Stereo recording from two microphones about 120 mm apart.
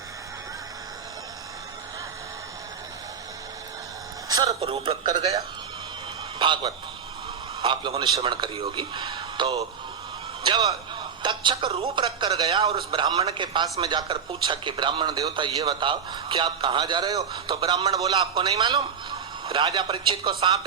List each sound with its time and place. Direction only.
4.3 s speech: 30° right (ahead or behind)
4.6 s speech: 50° right (ahead or behind)
5.0 s speech: 35° right (ahead or behind)
6.4 s speech: 40° right (ahead or behind)